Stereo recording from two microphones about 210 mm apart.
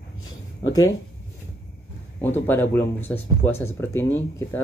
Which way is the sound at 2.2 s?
10° left (ahead or behind).